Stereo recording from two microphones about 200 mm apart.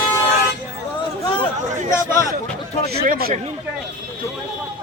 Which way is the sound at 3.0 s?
45° right (ahead or behind).